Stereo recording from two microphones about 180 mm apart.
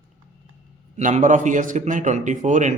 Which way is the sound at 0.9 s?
40° right (ahead or behind).